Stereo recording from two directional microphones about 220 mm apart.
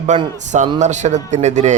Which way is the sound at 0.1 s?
35° right (ahead or behind).